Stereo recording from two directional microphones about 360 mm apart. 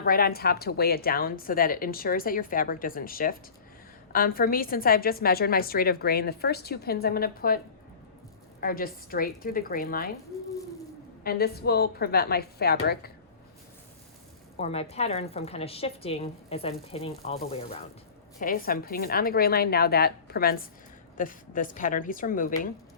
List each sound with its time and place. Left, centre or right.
0.0 s a woman's voice: left
8.6 s a woman's voice: left
11.2 s a woman's voice: left
14.5 s a woman's voice: centre